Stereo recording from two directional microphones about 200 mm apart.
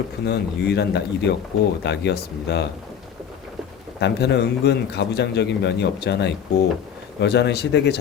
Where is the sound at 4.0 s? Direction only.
60° left (ahead or behind).